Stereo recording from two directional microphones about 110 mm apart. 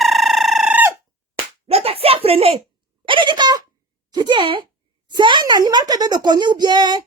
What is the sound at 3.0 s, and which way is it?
Speech, 50° right (ahead or behind).